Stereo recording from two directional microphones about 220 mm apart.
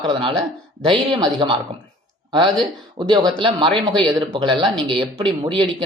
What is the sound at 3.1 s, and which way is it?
Speech, 20° right (ahead or behind).